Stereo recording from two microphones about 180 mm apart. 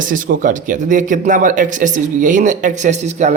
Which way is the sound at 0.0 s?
45° right (ahead or behind).